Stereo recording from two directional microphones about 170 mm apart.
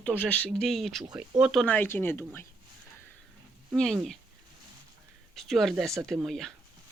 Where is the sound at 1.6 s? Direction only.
10° left (ahead or behind).